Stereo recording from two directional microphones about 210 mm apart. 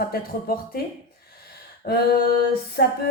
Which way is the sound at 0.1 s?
45° left (ahead or behind).